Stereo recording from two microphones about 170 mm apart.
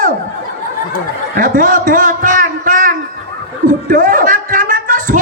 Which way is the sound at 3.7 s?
50° right (ahead or behind).